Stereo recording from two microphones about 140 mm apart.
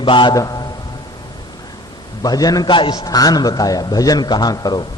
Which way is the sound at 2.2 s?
25° left (ahead or behind).